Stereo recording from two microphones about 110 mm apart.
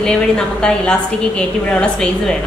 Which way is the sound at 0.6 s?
10° left (ahead or behind).